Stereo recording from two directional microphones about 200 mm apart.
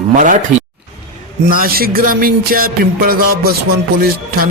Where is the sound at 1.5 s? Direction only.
45° right (ahead or behind).